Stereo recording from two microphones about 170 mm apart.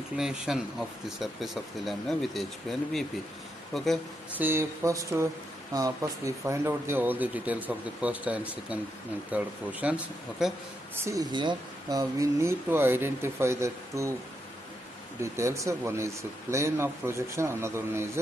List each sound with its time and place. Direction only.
0.2 s speech: 5° right (ahead or behind)
4.4 s speech: 15° right (ahead or behind)
11.1 s speech: 25° right (ahead or behind)
15.3 s speech: 15° right (ahead or behind)